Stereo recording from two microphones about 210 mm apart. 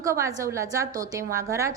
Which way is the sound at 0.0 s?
15° right (ahead or behind).